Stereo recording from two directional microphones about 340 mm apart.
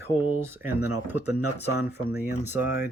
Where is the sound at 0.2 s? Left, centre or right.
Right.